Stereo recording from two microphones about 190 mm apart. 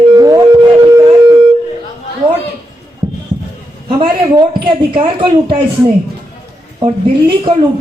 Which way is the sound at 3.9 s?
25° right (ahead or behind).